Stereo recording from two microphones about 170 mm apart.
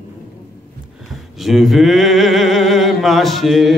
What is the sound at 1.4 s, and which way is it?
Mantra, centre (ahead or behind).